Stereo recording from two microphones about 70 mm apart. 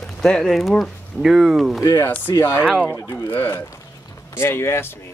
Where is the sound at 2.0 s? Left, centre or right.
Left.